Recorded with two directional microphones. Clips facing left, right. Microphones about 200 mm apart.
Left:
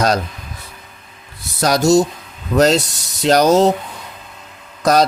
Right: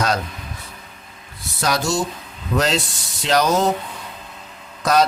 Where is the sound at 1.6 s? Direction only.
40° left (ahead or behind).